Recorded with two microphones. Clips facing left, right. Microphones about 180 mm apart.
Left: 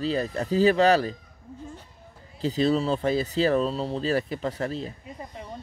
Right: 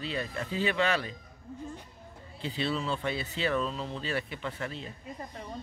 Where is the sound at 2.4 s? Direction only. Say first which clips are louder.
Left 9 dB; 40° left (ahead or behind).